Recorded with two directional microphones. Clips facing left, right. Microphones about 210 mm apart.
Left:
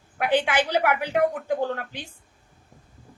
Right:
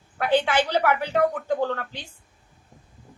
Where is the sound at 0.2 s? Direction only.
15° left (ahead or behind).